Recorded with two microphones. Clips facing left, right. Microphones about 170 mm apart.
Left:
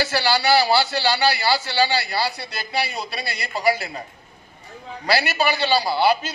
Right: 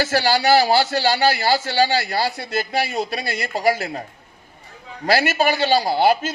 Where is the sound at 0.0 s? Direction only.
45° right (ahead or behind).